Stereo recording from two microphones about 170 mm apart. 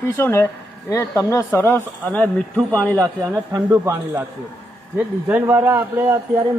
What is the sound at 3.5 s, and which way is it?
Speech, 15° right (ahead or behind).